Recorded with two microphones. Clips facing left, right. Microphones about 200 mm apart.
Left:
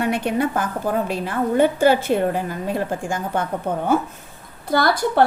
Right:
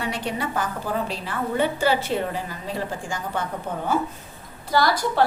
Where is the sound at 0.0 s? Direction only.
55° left (ahead or behind).